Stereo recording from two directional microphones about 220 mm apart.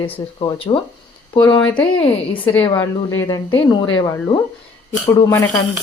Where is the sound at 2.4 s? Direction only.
5° left (ahead or behind).